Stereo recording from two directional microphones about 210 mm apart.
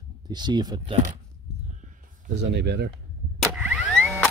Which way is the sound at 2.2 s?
50° right (ahead or behind).